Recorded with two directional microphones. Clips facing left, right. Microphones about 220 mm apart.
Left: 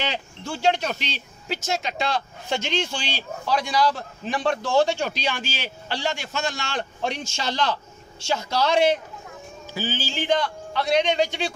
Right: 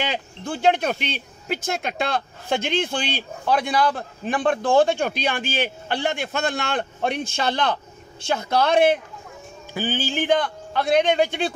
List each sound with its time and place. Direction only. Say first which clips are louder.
0.0 s speech: right 2 dB; 50° right (ahead or behind)